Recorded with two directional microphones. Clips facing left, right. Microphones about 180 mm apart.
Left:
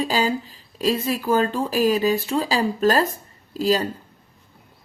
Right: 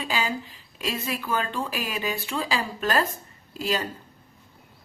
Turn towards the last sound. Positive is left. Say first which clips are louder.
# left 7 dB
turn(degrees=35)  # may be behind; listen again after turning